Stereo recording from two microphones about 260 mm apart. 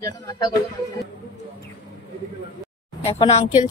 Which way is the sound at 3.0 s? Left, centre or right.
Left.